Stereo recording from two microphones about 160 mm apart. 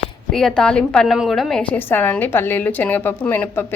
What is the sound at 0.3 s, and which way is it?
A woman's voice, 5° left (ahead or behind).